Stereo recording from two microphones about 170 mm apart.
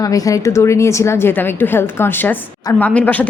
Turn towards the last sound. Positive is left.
turn(degrees=10)  # may be behind; listen again after turning